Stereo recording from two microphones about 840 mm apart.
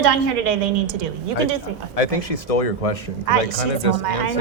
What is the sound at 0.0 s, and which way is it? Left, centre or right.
A woman's voice, right.